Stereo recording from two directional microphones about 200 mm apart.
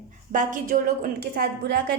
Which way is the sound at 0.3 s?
45° right (ahead or behind).